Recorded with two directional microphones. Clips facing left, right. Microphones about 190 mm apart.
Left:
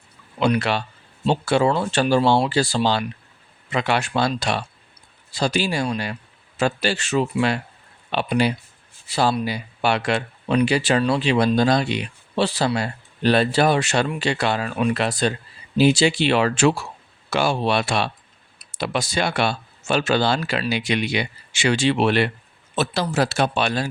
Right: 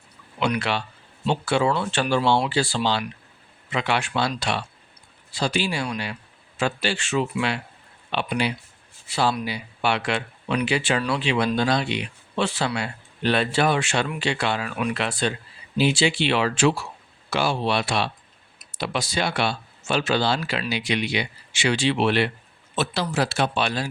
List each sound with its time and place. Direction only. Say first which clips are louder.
0.3 s speech: left 4 dB; 40° left (ahead or behind)